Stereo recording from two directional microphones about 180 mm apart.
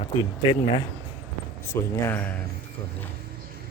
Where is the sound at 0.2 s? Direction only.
25° left (ahead or behind).